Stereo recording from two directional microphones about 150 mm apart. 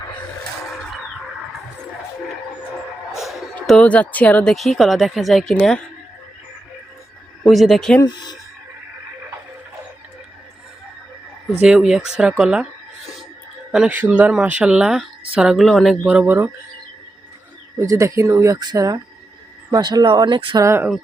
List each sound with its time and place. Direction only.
3.2 s a sound: centre (ahead or behind)
3.5 s a woman's voice: 5° left (ahead or behind)
7.4 s a woman's voice: centre (ahead or behind)
8.0 s speech: 30° left (ahead or behind)
11.6 s a woman's voice: 5° right (ahead or behind)
13.7 s a woman's voice: 5° right (ahead or behind)
16.2 s speech: 10° right (ahead or behind)
17.7 s speech: 20° right (ahead or behind)
20.7 s speech: 15° right (ahead or behind)